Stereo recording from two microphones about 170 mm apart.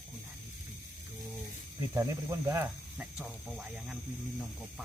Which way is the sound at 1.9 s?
15° right (ahead or behind).